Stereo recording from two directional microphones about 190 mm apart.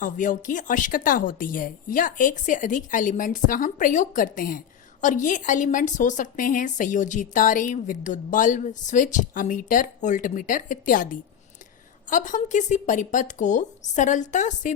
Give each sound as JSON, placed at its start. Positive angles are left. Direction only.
{"t": 0.0, "sound": "a woman's voice", "side_deg": 45}